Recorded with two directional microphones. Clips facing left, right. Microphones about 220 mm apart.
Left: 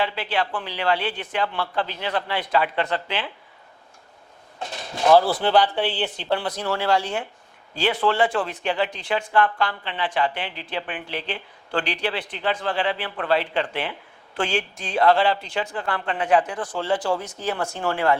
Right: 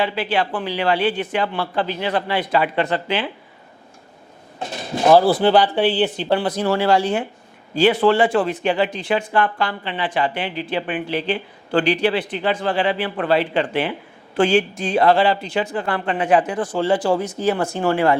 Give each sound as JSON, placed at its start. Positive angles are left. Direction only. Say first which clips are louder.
{"t": 0.0, "sound": "speech", "louder": "right 4 dB", "side_deg": -10}
{"t": 4.6, "sound": "speech", "louder": "right 4 dB", "side_deg": -5}